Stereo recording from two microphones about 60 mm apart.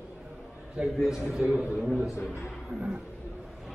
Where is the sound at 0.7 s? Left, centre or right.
Centre.